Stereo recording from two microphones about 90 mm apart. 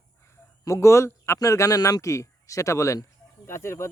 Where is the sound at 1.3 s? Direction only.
35° left (ahead or behind).